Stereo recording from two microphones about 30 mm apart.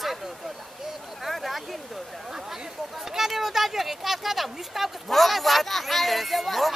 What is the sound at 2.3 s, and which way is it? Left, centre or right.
Speech, centre.